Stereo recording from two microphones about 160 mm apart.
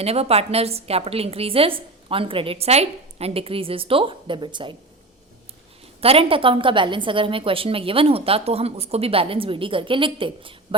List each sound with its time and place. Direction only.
0.0 s a woman's voice: 40° right (ahead or behind)
6.0 s a woman's voice: 35° right (ahead or behind)